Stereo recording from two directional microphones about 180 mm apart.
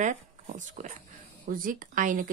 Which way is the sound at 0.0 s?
45° right (ahead or behind).